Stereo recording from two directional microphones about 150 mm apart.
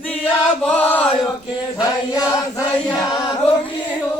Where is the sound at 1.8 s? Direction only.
25° left (ahead or behind).